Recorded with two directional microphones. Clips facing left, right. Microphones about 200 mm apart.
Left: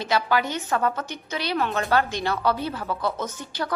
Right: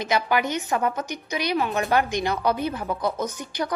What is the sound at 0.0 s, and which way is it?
A woman's voice, 15° right (ahead or behind).